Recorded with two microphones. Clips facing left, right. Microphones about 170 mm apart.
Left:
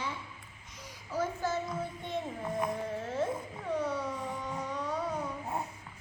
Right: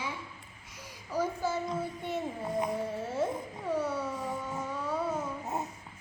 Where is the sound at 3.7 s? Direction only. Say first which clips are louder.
Right 1 dB; 5° right (ahead or behind).